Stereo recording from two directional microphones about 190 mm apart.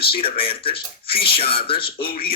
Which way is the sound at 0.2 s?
30° left (ahead or behind).